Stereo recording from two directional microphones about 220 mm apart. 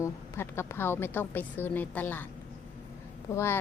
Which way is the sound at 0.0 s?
10° left (ahead or behind).